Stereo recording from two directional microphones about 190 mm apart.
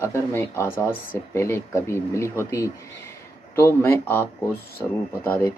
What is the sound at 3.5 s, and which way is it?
Speech, 10° left (ahead or behind).